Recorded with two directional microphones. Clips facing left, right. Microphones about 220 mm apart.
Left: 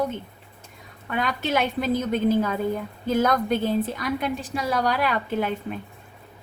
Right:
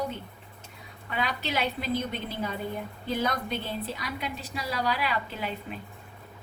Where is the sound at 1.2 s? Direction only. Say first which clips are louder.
Left 6 dB; 50° left (ahead or behind).